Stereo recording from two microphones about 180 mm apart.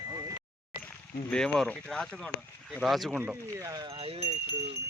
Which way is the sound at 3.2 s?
20° right (ahead or behind).